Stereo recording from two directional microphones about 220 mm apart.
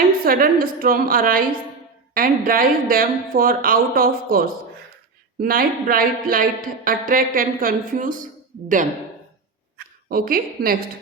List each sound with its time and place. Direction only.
0.3 s speech: 40° right (ahead or behind)
10.1 s speech: 40° right (ahead or behind)